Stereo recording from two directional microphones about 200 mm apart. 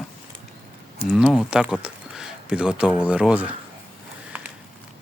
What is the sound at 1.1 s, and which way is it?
Speech, 5° right (ahead or behind).